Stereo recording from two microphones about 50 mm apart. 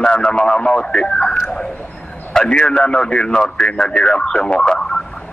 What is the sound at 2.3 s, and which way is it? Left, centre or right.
A man's voice, left.